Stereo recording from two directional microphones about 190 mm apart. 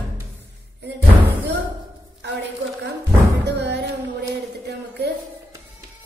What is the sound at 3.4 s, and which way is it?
Music, 65° right (ahead or behind).